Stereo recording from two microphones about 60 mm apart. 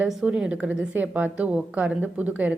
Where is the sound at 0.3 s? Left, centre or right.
Centre.